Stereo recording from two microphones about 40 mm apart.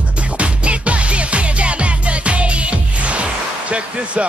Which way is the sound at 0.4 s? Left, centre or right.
Right.